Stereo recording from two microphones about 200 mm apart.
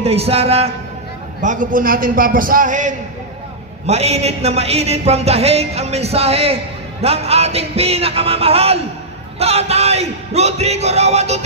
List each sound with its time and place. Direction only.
0.0 s a man's voice: 30° right (ahead or behind)